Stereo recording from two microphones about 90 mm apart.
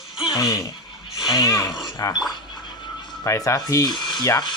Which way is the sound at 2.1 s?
55° left (ahead or behind).